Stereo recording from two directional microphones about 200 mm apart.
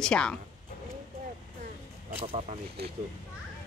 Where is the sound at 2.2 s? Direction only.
30° right (ahead or behind).